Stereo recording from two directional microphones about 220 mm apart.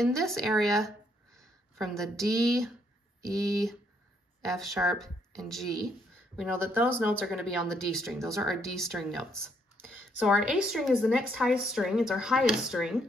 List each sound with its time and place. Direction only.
0.0 s a woman's voice: centre (ahead or behind)
2.0 s a woman's voice: centre (ahead or behind)